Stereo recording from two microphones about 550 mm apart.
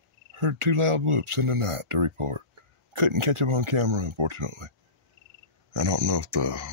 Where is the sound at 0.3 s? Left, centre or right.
Right.